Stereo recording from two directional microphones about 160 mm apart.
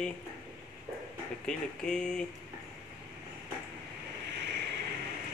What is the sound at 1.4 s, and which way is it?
Speech, 5° left (ahead or behind).